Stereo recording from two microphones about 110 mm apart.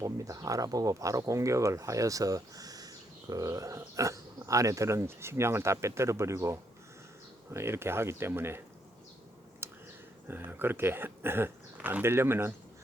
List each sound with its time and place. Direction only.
0.0 s speech: 30° right (ahead or behind)
9.6 s a sound: 20° right (ahead or behind)
10.2 s speech: 20° right (ahead or behind)